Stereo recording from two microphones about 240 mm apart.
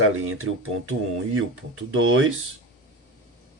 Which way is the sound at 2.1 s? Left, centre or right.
Right.